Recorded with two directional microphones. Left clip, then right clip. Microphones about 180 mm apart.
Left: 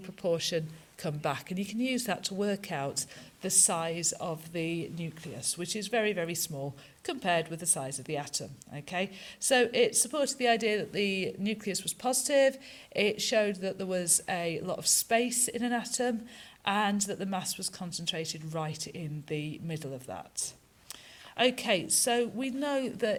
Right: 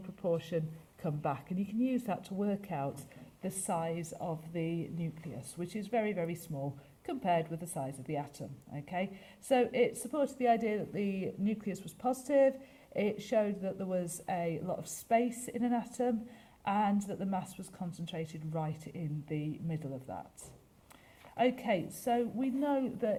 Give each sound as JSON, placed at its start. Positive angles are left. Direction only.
{"t": 0.2, "sound": "speech", "side_deg": 15}
{"t": 21.3, "sound": "speech", "side_deg": 25}